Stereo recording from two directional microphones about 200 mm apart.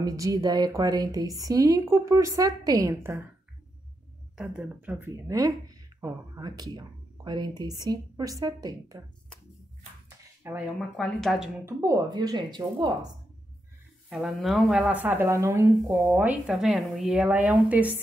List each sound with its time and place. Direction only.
0.0 s a woman's voice: 15° right (ahead or behind)
4.4 s a woman's voice: 5° right (ahead or behind)
10.0 s a sound: 10° right (ahead or behind)
11.0 s speech: centre (ahead or behind)
11.6 s speech: 15° right (ahead or behind)
14.0 s a woman's voice: centre (ahead or behind)